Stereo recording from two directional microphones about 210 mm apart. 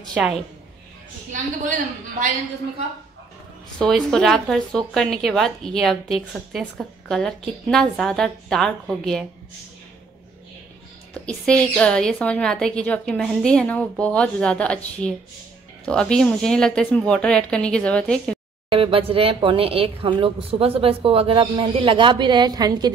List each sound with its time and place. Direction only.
0.1 s speech: centre (ahead or behind)
1.3 s a woman's voice: 40° right (ahead or behind)
3.8 s speech: centre (ahead or behind)
11.2 s speech: 5° left (ahead or behind)
18.7 s speech: 25° right (ahead or behind)